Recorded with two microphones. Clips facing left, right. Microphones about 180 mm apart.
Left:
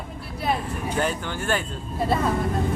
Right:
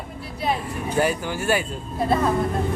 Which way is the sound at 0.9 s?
10° right (ahead or behind).